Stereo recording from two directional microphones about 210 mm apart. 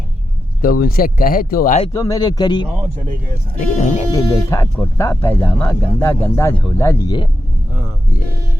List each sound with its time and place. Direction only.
0.6 s speech: 45° left (ahead or behind)
1.9 s speech: 15° left (ahead or behind)
3.6 s speech: 35° left (ahead or behind)
4.1 s speech: 10° left (ahead or behind)